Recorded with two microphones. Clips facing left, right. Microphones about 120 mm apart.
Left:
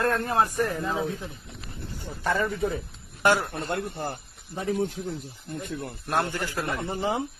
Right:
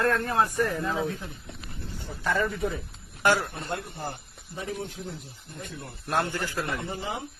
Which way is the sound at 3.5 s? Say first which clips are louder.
Left 4 dB; 65° left (ahead or behind).